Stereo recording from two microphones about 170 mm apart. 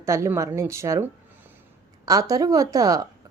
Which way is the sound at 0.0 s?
15° right (ahead or behind).